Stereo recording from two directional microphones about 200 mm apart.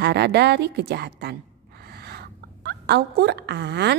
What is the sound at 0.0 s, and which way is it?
A woman's voice, 55° right (ahead or behind).